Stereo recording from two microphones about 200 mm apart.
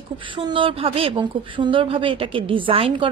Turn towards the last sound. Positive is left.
turn(degrees=-30)  # may be behind; listen again after turning